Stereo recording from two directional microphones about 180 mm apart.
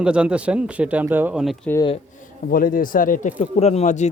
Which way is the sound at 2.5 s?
50° left (ahead or behind).